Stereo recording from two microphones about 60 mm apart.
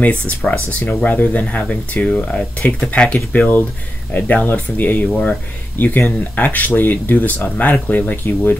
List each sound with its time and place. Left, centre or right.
0.5 s speech: left